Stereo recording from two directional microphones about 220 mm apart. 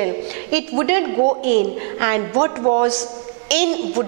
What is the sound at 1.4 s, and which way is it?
Speech, 45° right (ahead or behind).